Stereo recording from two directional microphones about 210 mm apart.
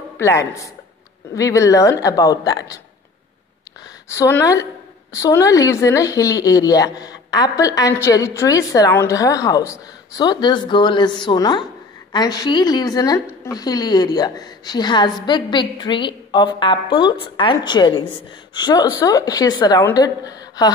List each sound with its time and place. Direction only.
0.2 s speech: 15° left (ahead or behind)
4.1 s a woman's voice: 15° left (ahead or behind)